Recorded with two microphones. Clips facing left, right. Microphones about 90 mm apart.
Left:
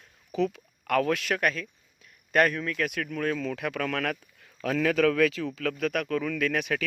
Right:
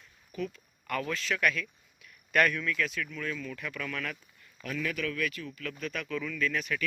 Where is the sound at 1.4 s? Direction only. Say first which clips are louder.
Left 2 dB; 35° left (ahead or behind).